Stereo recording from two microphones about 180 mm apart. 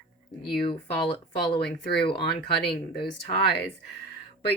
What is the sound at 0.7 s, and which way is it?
Speech, 30° left (ahead or behind).